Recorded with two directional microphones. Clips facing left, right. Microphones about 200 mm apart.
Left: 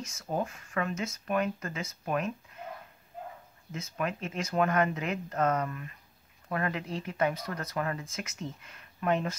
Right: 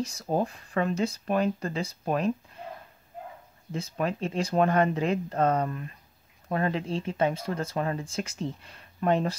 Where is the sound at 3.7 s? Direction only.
30° right (ahead or behind).